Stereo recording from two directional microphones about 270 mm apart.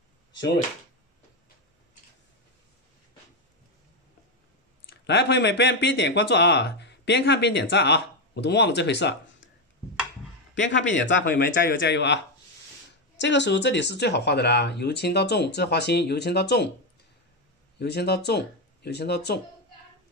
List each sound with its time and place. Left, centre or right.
4.8 s speech: left
10.7 s speech: left
13.2 s speech: left
17.7 s speech: left